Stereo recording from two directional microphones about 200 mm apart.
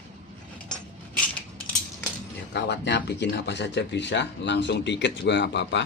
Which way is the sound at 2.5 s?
60° left (ahead or behind).